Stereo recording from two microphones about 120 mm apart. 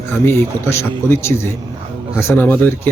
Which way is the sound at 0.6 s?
20° left (ahead or behind).